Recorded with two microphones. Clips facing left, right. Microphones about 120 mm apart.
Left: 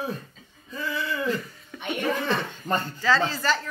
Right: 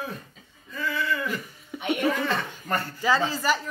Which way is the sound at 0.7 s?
20° left (ahead or behind).